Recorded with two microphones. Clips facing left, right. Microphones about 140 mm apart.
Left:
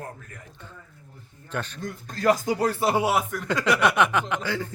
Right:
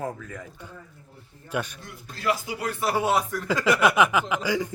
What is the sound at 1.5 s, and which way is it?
Speech, 10° right (ahead or behind).